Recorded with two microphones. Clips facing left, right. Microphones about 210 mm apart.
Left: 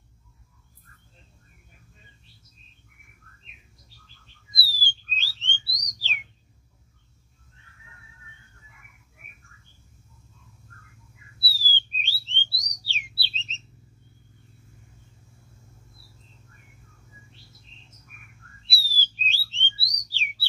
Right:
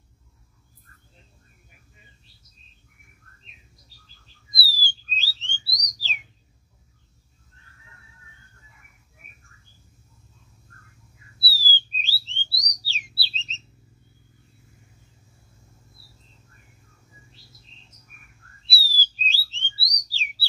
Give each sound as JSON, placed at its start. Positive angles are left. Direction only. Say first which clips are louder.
{"t": 3.4, "sound": "bird", "louder": "even", "side_deg": -35}
{"t": 11.5, "sound": "bird", "louder": "right 3 dB", "side_deg": -35}
{"t": 17.3, "sound": "bird", "louder": "left 1 dB", "side_deg": -35}